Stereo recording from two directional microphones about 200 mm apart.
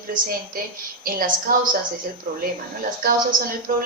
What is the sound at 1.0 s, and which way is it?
Speech, 45° right (ahead or behind).